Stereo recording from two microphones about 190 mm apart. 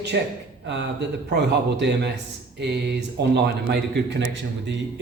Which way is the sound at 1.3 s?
65° right (ahead or behind).